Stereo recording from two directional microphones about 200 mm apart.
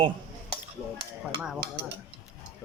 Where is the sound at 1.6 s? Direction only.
50° right (ahead or behind).